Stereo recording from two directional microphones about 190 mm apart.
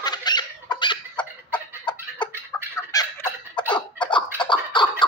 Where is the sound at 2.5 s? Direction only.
10° left (ahead or behind).